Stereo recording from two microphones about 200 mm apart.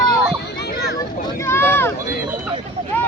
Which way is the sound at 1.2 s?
15° left (ahead or behind).